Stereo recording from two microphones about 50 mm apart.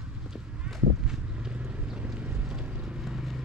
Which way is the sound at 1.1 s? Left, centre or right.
Centre.